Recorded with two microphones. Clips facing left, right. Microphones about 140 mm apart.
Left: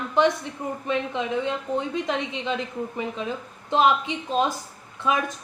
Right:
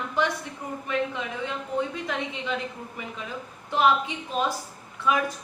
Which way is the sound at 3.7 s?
20° left (ahead or behind).